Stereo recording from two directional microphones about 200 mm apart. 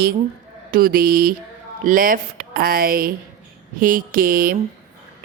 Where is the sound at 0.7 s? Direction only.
45° right (ahead or behind).